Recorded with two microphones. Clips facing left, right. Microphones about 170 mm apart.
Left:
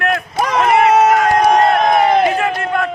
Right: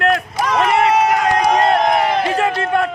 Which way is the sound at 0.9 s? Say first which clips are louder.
Left 3 dB; 50° left (ahead or behind).